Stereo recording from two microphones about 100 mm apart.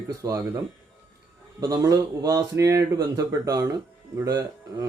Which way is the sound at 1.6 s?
35° right (ahead or behind).